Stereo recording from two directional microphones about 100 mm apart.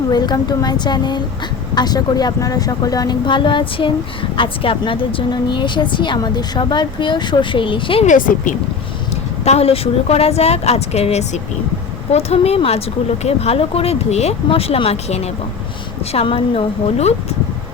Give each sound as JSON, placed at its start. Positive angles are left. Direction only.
{"t": 0.1, "sound": "a woman's voice", "side_deg": 45}
{"t": 3.2, "sound": "a woman's voice", "side_deg": 55}
{"t": 9.4, "sound": "a woman's voice", "side_deg": 90}
{"t": 16.2, "sound": "speech", "side_deg": 65}